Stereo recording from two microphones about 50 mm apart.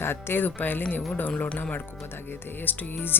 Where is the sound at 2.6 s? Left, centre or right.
Left.